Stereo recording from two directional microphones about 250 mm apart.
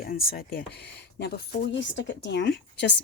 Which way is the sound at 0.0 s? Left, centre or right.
Left.